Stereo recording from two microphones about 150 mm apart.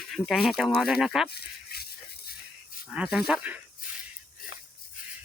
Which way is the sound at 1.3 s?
90° left.